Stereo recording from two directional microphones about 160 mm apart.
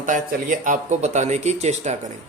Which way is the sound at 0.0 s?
55° right (ahead or behind).